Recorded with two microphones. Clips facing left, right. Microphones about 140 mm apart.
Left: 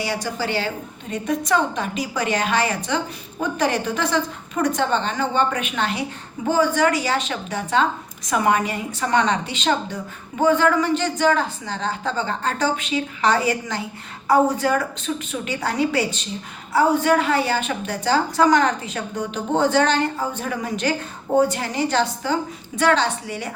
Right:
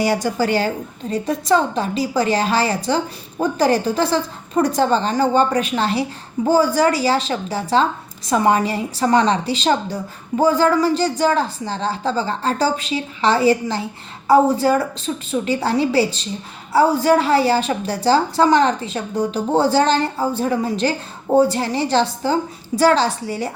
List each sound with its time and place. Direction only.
0.0 s a woman's voice: 40° right (ahead or behind)
1.1 s a woman's voice: 30° right (ahead or behind)